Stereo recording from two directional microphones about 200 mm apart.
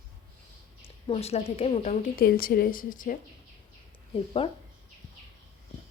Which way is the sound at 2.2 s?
45° left (ahead or behind).